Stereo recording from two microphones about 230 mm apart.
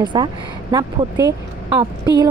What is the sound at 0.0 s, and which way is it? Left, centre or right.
A woman's voice, centre.